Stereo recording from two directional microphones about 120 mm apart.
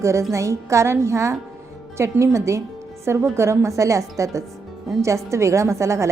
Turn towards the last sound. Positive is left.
turn(degrees=-25)  # may be behind; listen again after turning